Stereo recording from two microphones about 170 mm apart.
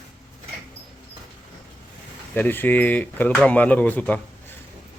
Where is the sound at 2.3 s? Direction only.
10° left (ahead or behind).